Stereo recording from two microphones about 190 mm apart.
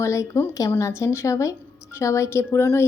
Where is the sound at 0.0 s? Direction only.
15° left (ahead or behind).